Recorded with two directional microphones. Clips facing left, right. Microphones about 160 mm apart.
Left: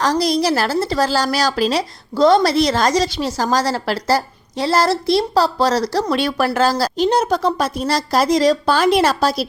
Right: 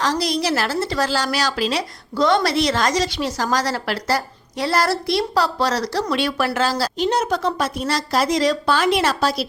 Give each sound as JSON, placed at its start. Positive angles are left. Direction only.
{"t": 0.0, "sound": "a woman's voice", "side_deg": 40}